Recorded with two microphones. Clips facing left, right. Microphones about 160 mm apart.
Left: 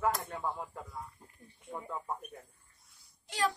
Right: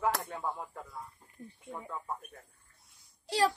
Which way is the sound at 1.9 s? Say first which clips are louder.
Left 1 dB; 15° left (ahead or behind).